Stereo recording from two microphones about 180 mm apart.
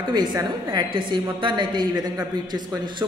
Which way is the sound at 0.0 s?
25° right (ahead or behind).